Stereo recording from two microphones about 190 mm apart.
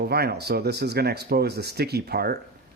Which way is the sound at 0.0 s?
55° right (ahead or behind).